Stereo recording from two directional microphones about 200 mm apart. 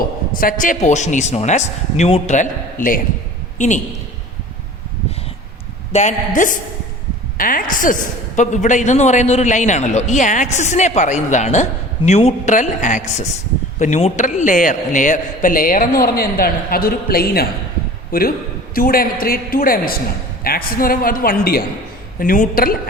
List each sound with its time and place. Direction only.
0.3 s a man's voice: 45° left (ahead or behind)
5.9 s a man's voice: 35° left (ahead or behind)